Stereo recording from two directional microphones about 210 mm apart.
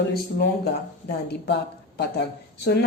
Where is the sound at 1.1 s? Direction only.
50° left (ahead or behind).